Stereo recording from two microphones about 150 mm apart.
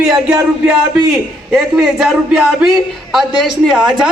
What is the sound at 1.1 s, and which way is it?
A man's voice, 5° right (ahead or behind).